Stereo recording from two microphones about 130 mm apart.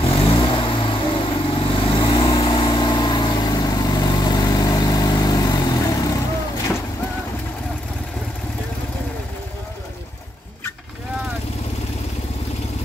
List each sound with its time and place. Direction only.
0.0 s vehicle: 45° left (ahead or behind); by 6.1 s 30° left (ahead or behind)